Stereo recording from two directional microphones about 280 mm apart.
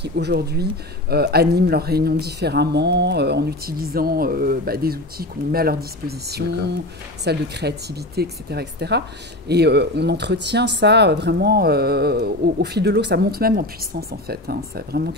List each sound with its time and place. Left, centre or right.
0.0 s speech: right